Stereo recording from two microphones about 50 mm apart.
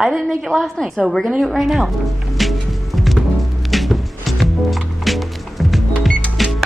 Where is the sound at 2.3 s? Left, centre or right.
Centre.